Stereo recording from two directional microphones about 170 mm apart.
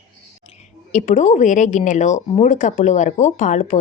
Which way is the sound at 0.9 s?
45° left (ahead or behind).